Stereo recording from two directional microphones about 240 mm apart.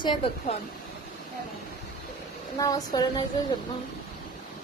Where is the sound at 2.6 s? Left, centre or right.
Centre.